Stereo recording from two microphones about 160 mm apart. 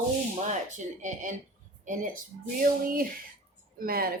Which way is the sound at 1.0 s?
50° right (ahead or behind).